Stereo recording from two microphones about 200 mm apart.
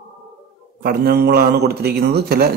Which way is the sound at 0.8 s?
50° right (ahead or behind).